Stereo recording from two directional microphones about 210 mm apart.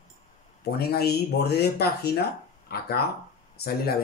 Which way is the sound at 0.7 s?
50° left (ahead or behind).